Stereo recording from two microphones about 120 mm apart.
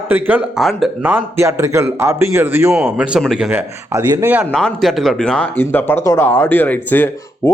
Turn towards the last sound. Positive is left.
turn(degrees=15)  # may be behind; listen again after turning